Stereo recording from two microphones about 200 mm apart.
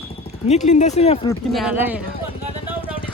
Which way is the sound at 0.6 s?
35° left (ahead or behind).